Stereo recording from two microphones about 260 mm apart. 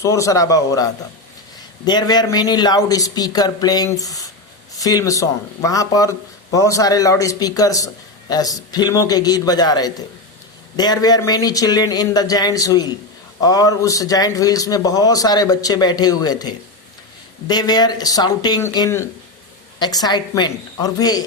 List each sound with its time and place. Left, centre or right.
0.0 s a man's voice: centre